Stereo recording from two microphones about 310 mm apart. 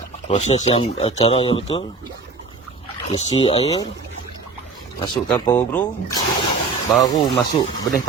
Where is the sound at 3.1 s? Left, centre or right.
Centre.